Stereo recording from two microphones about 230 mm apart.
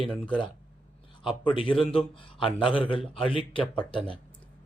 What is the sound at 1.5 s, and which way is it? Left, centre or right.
Speech, left.